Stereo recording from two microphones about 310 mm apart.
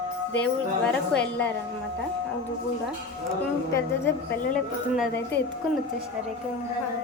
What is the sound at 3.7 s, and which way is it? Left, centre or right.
Speech, centre.